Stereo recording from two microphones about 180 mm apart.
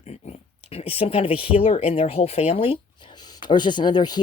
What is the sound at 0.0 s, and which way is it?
Dog, 35° left (ahead or behind).